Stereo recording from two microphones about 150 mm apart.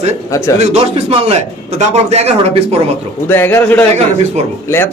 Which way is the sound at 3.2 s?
15° left (ahead or behind).